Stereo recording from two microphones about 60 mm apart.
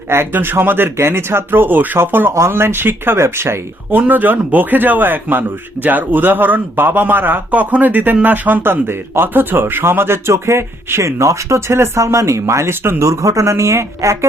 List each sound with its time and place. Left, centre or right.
0.1 s a man's voice: right
4.0 s a man's voice: right
13.1 s speech: right